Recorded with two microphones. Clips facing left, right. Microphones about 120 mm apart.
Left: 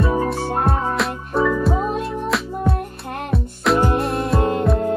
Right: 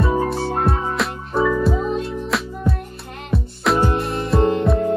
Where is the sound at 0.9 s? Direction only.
Centre (ahead or behind).